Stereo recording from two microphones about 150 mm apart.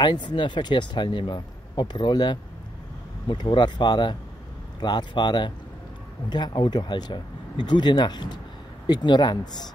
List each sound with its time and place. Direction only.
0.0 s speech: 30° left (ahead or behind)